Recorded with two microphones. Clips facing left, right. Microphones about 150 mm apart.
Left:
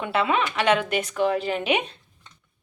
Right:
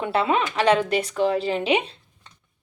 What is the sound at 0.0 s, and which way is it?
Speech, 35° right (ahead or behind).